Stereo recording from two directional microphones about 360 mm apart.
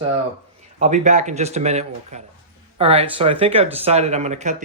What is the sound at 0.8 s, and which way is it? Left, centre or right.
Speech, centre.